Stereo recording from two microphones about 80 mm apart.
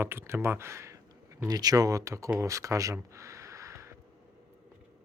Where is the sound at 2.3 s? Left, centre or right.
Right.